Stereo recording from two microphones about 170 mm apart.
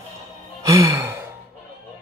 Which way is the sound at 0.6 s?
20° right (ahead or behind).